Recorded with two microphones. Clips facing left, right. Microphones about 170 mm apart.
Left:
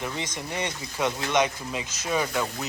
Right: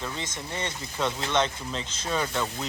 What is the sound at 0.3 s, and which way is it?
Speech, 15° left (ahead or behind).